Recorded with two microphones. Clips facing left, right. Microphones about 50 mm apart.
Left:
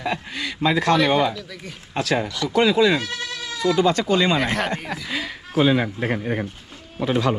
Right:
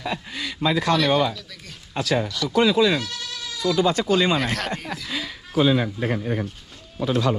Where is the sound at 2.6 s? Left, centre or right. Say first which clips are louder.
Left 1 dB; left.